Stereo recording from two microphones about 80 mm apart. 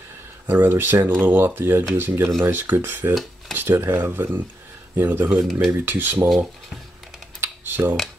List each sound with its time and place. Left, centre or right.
0.5 s speech: right
5.4 s speech: centre
5.7 s speech: right
7.3 s computer keyboard: right